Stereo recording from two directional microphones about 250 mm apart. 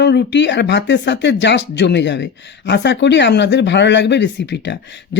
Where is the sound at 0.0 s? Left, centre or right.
Left.